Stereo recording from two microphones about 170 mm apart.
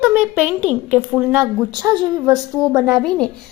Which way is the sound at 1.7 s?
25° right (ahead or behind).